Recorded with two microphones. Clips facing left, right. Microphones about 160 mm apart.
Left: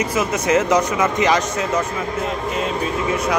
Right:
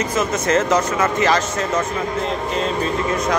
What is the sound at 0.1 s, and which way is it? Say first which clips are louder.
A man's voice: even; 10° left (ahead or behind).